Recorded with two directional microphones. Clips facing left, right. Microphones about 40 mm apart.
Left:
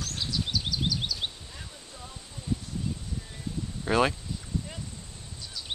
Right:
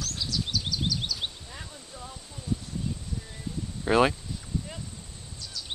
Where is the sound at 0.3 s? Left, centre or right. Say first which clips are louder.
Even; centre.